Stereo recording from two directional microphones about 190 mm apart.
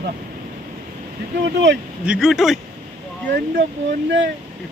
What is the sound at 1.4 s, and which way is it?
Speech, 70° right (ahead or behind).